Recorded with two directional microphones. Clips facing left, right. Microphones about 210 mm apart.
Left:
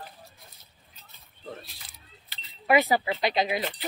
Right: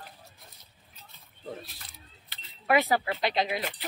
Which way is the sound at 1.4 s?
5° right (ahead or behind).